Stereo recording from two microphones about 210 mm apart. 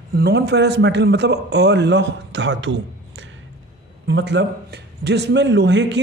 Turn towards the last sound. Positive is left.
turn(degrees=-55)  # may be behind; listen again after turning